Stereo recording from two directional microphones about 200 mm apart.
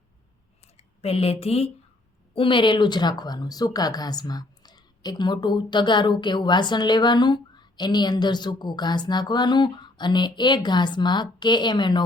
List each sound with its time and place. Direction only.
0.8 s speech: 30° left (ahead or behind)